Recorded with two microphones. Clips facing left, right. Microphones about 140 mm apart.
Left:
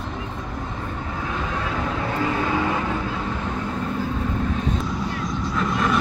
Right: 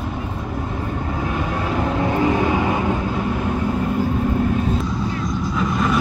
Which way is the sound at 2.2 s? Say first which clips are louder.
Right 3 dB; 15° right (ahead or behind).